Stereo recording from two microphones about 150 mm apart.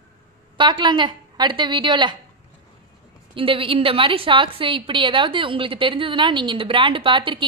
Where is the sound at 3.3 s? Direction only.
35° right (ahead or behind).